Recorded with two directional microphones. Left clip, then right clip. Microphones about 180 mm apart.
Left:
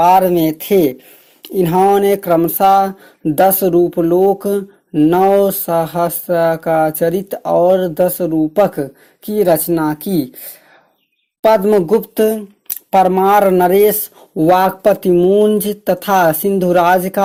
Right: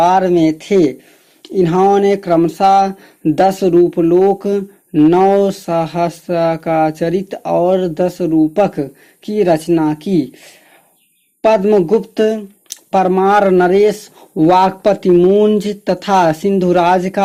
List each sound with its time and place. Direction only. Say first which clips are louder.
0.0 s speech: left 1 dB; 40° left (ahead or behind)
11.4 s speech: even; 25° left (ahead or behind)
14.3 s speech: right 1 dB; 20° left (ahead or behind)